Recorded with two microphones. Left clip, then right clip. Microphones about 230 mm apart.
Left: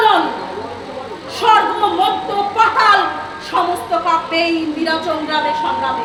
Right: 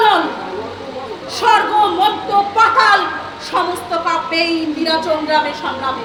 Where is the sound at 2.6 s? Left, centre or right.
Centre.